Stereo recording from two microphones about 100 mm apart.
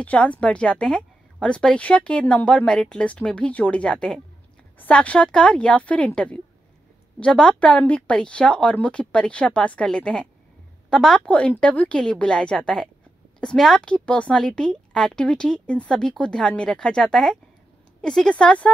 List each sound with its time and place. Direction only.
0.0 s a woman's voice: 15° left (ahead or behind)